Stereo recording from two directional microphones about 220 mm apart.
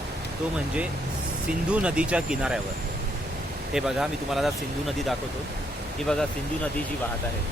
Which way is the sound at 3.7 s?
Centre (ahead or behind).